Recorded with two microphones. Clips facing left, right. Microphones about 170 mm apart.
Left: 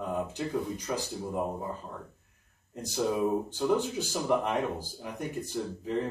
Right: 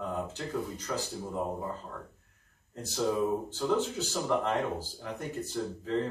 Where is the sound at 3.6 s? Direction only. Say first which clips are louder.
Left 1 dB; 15° left (ahead or behind).